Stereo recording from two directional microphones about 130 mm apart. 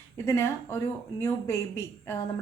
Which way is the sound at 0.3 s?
20° left (ahead or behind).